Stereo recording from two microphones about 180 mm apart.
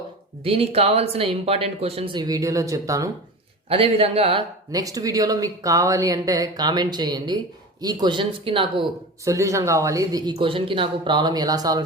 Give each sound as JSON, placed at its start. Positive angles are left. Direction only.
{"t": 0.4, "sound": "speech", "side_deg": -35}
{"t": 3.7, "sound": "speech", "side_deg": -35}
{"t": 4.7, "sound": "speech", "side_deg": -20}
{"t": 9.2, "sound": "speech", "side_deg": -15}